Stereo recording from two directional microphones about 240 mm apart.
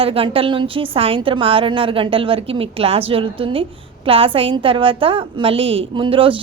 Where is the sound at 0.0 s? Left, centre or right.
Right.